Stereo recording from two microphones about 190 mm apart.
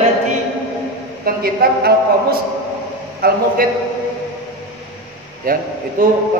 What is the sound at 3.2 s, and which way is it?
Speech, 55° right (ahead or behind).